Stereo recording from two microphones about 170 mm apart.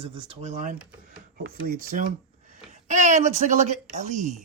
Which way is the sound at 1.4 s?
60° right (ahead or behind).